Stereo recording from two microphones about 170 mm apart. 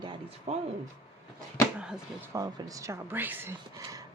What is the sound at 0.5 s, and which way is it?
Speech, 40° right (ahead or behind).